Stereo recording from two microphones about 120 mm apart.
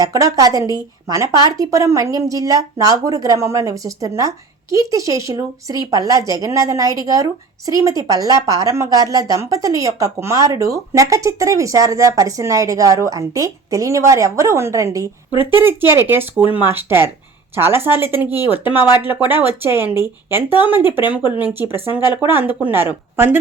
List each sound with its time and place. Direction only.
0.0 s a woman's voice: 30° right (ahead or behind)
22.0 s speech: 40° left (ahead or behind)
22.3 s speech: 15° right (ahead or behind)